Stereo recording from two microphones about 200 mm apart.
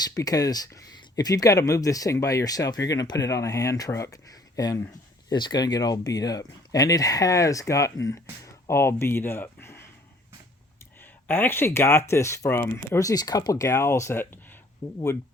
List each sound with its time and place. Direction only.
0.0 s speech: 15° left (ahead or behind)
11.0 s speech: 10° left (ahead or behind)